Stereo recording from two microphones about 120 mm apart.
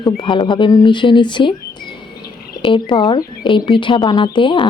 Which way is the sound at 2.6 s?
45° left (ahead or behind).